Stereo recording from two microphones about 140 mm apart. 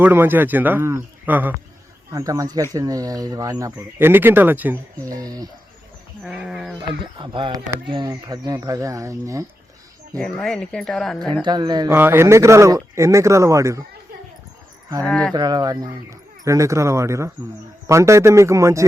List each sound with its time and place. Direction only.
0.0 s speech: 15° right (ahead or behind)
2.1 s speech: 25° right (ahead or behind)
5.0 s speech: 25° right (ahead or behind)
6.2 s speech: 5° right (ahead or behind)
7.0 s speech: 35° right (ahead or behind)
10.2 s speech: 5° left (ahead or behind)
11.4 s speech: 30° right (ahead or behind)
11.9 s speech: 15° right (ahead or behind)
15.0 s speech: 10° left (ahead or behind)
15.3 s speech: 30° right (ahead or behind)